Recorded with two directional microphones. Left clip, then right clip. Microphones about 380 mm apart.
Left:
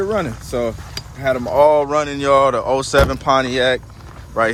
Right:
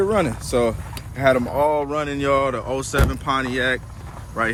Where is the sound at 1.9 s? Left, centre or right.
Centre.